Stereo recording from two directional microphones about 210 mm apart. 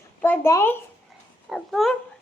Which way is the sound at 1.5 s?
Centre (ahead or behind).